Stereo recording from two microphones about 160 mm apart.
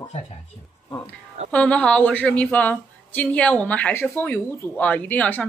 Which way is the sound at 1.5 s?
5° left (ahead or behind).